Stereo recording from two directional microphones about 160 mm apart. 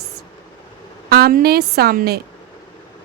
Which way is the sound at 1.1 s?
75° right (ahead or behind).